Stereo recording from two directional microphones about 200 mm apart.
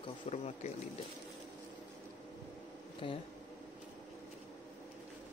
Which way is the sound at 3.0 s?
25° left (ahead or behind).